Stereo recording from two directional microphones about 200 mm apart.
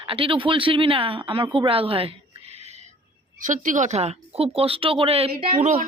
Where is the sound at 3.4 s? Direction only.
40° right (ahead or behind).